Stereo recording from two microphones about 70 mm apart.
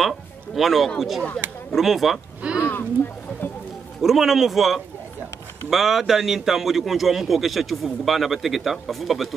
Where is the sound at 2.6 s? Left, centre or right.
Left.